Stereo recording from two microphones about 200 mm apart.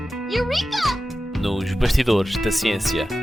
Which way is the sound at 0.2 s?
Centre (ahead or behind).